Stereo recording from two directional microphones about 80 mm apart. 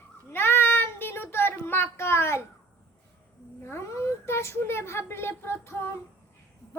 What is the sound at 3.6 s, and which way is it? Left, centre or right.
A child's voice, left.